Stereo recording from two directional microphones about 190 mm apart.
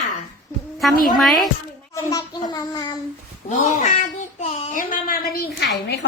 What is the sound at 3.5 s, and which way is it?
Speech, 40° left (ahead or behind).